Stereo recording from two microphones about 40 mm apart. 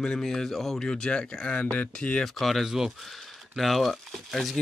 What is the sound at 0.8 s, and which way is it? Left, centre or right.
Speech, centre.